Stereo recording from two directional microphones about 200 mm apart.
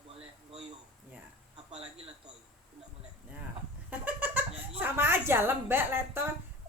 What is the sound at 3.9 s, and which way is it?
Goat, 10° right (ahead or behind).